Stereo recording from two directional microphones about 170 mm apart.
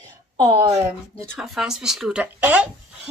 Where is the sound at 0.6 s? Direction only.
20° right (ahead or behind).